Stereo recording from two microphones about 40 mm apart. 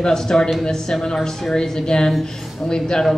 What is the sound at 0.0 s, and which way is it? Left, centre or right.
A woman's voice, centre.